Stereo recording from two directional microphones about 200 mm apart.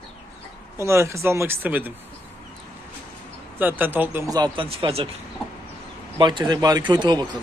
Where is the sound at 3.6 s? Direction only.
10° right (ahead or behind); by 5.0 s 25° right (ahead or behind).